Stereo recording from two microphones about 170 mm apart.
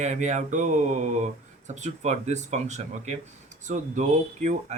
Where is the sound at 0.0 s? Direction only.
45° right (ahead or behind).